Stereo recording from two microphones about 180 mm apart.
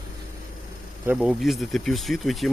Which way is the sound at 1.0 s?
5° right (ahead or behind).